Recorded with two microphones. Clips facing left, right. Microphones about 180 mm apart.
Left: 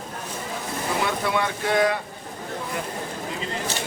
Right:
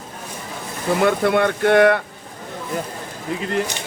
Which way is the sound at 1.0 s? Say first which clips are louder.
Right 10 dB; 55° right (ahead or behind).